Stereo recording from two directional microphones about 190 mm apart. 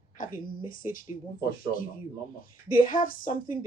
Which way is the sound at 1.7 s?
45° left (ahead or behind).